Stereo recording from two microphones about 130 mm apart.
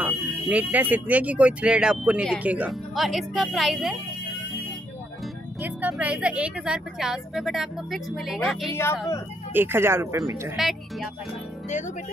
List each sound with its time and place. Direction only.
0.0 s speech: 10° right (ahead or behind)
2.9 s speech: centre (ahead or behind)
5.6 s speech: 10° right (ahead or behind)
9.5 s speech: 15° right (ahead or behind)
10.5 s speech: centre (ahead or behind)